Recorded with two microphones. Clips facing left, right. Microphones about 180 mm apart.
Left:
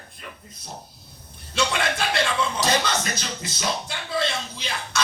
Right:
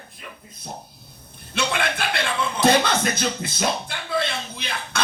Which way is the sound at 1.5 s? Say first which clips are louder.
Even; 55° right (ahead or behind).